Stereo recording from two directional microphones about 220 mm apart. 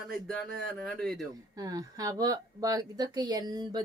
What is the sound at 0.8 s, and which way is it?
Speech, centre (ahead or behind).